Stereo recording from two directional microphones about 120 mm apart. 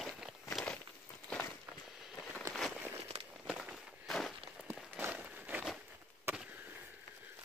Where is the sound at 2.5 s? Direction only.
Centre (ahead or behind).